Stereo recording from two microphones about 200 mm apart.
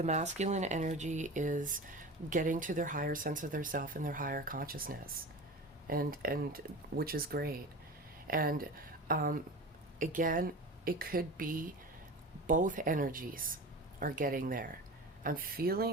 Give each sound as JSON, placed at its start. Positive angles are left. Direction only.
{"t": 0.0, "sound": "speech", "side_deg": -35}